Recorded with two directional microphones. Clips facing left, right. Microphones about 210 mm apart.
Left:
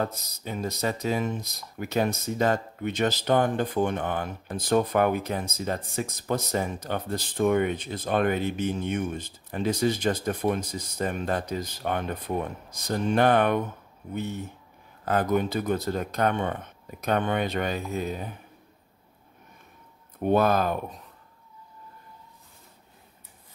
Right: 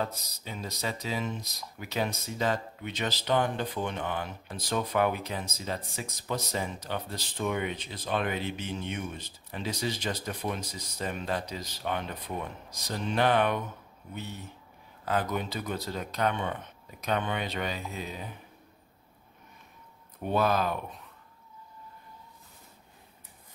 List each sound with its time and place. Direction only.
0.0 s speech: 50° left (ahead or behind)
15.0 s speech: 50° left (ahead or behind)
20.2 s speech: 50° left (ahead or behind)